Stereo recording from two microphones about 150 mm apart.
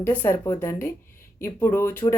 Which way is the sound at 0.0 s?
15° left (ahead or behind).